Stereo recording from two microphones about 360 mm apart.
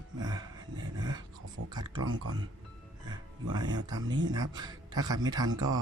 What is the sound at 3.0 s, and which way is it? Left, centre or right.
Speech, centre.